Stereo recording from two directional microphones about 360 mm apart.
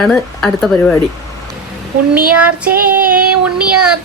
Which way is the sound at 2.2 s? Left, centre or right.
Right.